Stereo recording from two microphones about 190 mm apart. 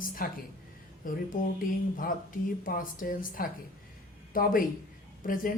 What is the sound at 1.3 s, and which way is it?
A woman's voice, 45° left (ahead or behind).